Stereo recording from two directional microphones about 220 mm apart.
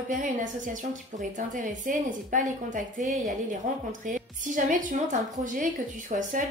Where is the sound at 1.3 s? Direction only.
35° right (ahead or behind).